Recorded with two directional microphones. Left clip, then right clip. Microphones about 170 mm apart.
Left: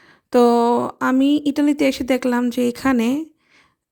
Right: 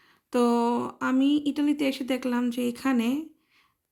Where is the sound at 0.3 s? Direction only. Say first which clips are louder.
Left 10 dB; 45° left (ahead or behind).